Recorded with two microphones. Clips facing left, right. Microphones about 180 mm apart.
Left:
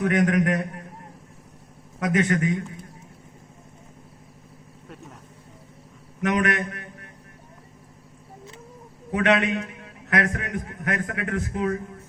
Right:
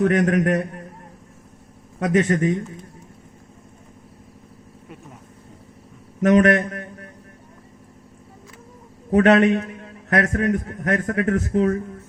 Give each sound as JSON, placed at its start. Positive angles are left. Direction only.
{"t": 0.0, "sound": "a man's voice", "side_deg": -40}
{"t": 2.0, "sound": "a man's voice", "side_deg": -35}
{"t": 6.2, "sound": "a man's voice", "side_deg": -40}
{"t": 9.1, "sound": "a man's voice", "side_deg": -40}